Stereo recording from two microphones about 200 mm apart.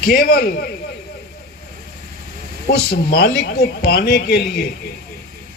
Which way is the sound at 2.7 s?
50° left (ahead or behind).